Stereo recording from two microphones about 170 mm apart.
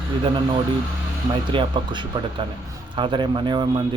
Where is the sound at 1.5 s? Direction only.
25° right (ahead or behind).